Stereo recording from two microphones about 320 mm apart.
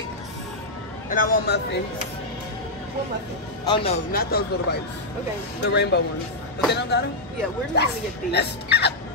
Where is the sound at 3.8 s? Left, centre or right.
Left.